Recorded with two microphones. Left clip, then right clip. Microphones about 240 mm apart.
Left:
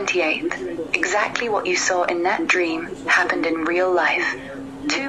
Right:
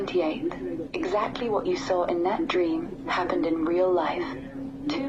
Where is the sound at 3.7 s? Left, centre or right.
Left.